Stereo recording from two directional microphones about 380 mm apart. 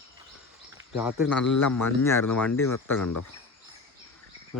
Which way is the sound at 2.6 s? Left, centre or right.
Left.